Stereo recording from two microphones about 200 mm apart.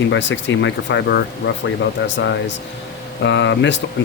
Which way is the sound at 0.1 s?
65° left (ahead or behind).